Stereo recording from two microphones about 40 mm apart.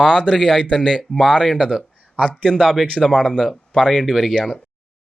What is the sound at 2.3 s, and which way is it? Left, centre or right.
Speech, centre.